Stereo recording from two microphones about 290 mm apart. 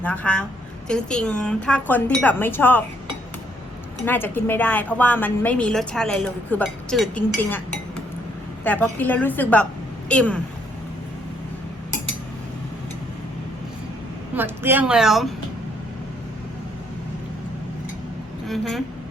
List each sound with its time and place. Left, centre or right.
0.0 s a woman's voice: centre
4.0 s a woman's voice: centre
8.6 s a woman's voice: centre
14.3 s a woman's voice: centre
18.4 s speech: centre